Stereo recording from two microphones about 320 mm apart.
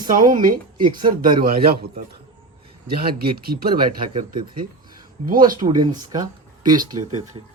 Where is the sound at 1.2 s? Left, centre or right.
Right.